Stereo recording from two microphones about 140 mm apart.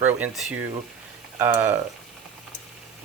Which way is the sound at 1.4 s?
15° right (ahead or behind).